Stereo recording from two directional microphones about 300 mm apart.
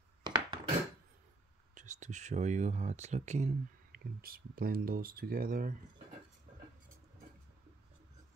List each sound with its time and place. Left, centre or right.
0.2 s chopping: centre
1.8 s speech: right